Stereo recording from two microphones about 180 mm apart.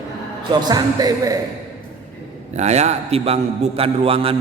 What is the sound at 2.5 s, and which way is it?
A man's voice, 40° right (ahead or behind).